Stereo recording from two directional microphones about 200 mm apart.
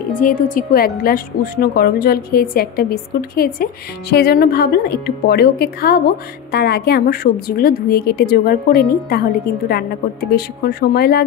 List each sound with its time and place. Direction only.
0.1 s a woman's voice: 40° left (ahead or behind)
10.3 s a woman's voice: 50° left (ahead or behind)